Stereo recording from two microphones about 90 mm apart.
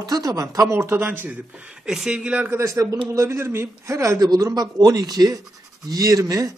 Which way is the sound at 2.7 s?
40° right (ahead or behind).